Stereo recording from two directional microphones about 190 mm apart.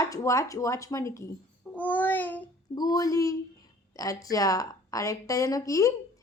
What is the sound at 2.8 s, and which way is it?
A child's voice, 20° left (ahead or behind).